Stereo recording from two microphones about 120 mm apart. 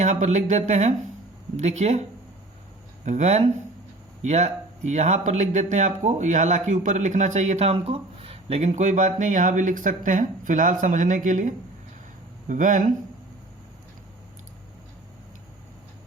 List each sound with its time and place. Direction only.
0.0 s speech: 75° right (ahead or behind)
3.0 s speech: 80° right